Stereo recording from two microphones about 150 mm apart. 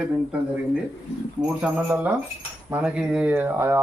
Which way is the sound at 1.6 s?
5° right (ahead or behind).